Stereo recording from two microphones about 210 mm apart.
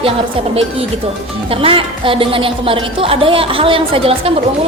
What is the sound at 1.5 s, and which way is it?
A woman's voice, 25° right (ahead or behind).